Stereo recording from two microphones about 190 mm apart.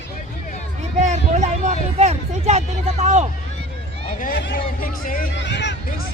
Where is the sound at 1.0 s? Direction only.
40° right (ahead or behind).